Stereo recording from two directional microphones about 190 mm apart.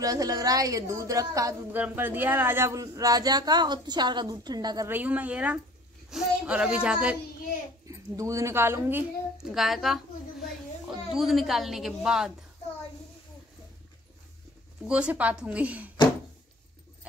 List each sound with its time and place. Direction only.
0.0 s a woman's voice: 20° right (ahead or behind)
7.8 s a woman's voice: 15° right (ahead or behind)
14.9 s a woman's voice: 5° right (ahead or behind)